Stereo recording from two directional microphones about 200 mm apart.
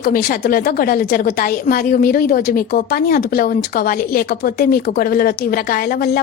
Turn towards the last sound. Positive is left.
turn(degrees=50)  # may be behind; listen again after turning